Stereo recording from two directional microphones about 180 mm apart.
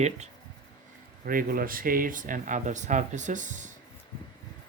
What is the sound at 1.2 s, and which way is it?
Speech, 55° right (ahead or behind).